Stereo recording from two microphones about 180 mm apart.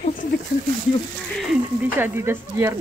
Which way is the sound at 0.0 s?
45° left (ahead or behind).